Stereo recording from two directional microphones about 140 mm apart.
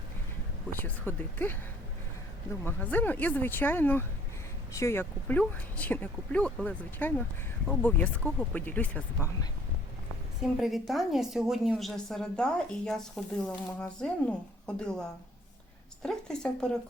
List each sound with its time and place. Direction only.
0.7 s speech: 15° left (ahead or behind)
2.6 s speech: 10° left (ahead or behind)
10.4 s a woman's voice: centre (ahead or behind)
16.0 s a woman's voice: 5° left (ahead or behind)